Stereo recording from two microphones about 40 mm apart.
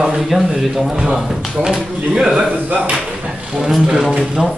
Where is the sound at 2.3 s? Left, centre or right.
Right.